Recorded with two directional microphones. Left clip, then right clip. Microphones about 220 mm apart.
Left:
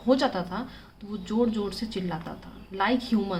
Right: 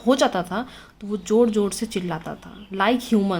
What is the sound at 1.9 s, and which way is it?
Speech, 55° right (ahead or behind).